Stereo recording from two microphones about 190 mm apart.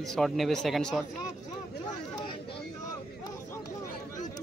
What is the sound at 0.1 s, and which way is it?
Speech, centre (ahead or behind).